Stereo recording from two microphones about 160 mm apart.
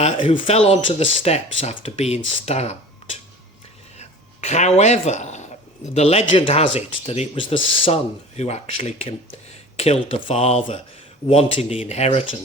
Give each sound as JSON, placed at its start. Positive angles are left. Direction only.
{"t": 0.2, "sound": "speech", "side_deg": 35}
{"t": 3.9, "sound": "speech", "side_deg": 45}